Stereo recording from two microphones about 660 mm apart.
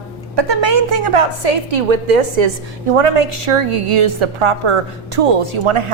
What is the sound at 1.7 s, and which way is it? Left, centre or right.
Speech, right.